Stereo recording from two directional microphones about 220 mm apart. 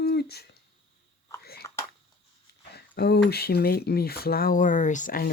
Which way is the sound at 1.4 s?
45° left (ahead or behind).